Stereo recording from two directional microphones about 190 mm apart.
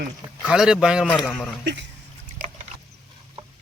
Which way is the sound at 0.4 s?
5° right (ahead or behind).